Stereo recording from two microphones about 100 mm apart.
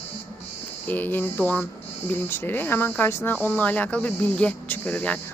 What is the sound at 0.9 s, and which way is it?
Speech, 20° left (ahead or behind).